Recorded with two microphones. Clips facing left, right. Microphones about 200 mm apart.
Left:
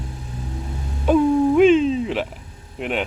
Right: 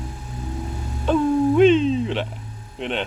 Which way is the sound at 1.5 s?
5° left (ahead or behind).